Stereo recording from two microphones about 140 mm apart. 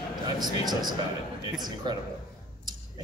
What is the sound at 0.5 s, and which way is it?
Speech, 30° right (ahead or behind).